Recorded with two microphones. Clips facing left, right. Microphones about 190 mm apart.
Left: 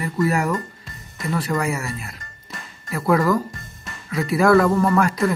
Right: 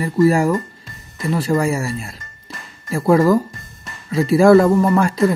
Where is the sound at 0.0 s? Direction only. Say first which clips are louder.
Right 7 dB; 30° right (ahead or behind).